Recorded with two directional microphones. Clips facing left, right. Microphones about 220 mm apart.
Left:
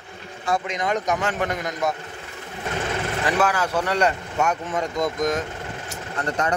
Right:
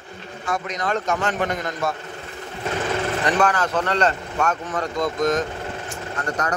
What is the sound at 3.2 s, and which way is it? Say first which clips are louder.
Speech: even; 5° left (ahead or behind).